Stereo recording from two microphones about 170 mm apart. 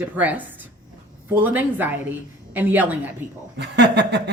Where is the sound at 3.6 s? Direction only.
90° right.